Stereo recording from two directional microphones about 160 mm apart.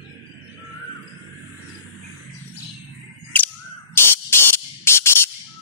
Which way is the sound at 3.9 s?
15° left (ahead or behind).